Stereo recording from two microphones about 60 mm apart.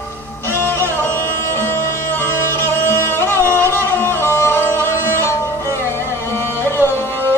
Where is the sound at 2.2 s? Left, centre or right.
Left.